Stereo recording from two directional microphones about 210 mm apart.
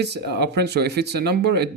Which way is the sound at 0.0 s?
50° right (ahead or behind).